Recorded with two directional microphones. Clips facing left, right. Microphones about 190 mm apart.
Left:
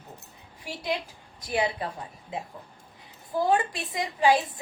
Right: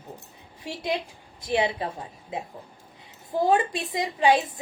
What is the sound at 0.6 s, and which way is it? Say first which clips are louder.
A woman's voice: right 2 dB; 25° right (ahead or behind).